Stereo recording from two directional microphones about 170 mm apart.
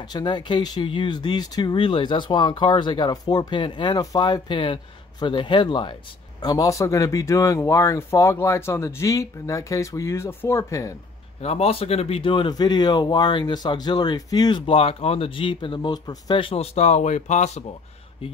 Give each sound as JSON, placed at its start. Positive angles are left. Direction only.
{"t": 0.0, "sound": "speech", "side_deg": 25}
{"t": 11.4, "sound": "speech", "side_deg": 35}